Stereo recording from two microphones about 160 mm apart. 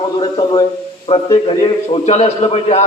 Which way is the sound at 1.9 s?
40° left (ahead or behind).